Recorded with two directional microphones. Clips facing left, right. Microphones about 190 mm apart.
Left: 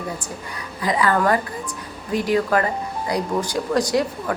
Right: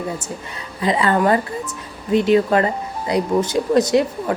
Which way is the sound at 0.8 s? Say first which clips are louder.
Right 2 dB; 25° right (ahead or behind).